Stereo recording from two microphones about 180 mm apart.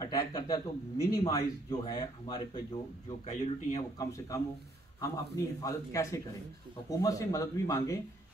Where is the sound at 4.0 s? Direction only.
20° left (ahead or behind).